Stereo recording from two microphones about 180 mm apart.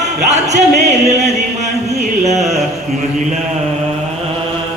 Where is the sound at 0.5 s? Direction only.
40° right (ahead or behind).